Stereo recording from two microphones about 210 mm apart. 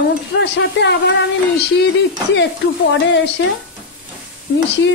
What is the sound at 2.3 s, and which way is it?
Speech, 55° left (ahead or behind).